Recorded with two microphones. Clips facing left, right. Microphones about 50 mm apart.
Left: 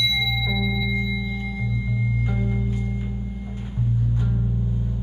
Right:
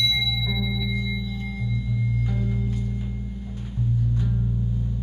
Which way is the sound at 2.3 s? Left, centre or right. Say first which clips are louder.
Left 2 dB; left.